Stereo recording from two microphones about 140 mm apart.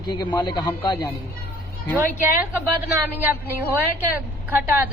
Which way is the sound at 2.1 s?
10° right (ahead or behind).